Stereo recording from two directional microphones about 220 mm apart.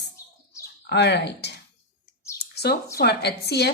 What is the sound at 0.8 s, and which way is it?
Speech, 50° left (ahead or behind).